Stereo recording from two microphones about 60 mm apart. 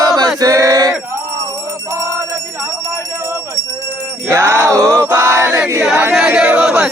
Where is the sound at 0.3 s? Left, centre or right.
Right.